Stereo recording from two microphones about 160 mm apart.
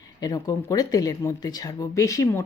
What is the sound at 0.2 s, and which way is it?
Speech, 20° left (ahead or behind).